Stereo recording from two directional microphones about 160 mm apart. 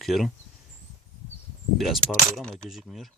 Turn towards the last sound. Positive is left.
turn(degrees=0)  # may be behind; listen again after turning